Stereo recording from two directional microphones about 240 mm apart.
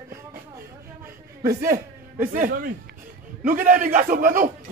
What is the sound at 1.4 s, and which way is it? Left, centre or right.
A man's voice, right.